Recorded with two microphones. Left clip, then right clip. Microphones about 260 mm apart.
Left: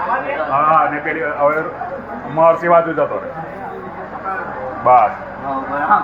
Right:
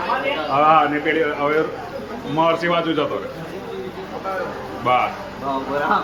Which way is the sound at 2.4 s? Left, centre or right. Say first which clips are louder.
Left 8 dB; centre.